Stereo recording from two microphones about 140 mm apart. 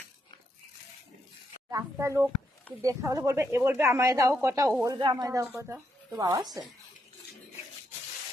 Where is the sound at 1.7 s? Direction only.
20° right (ahead or behind).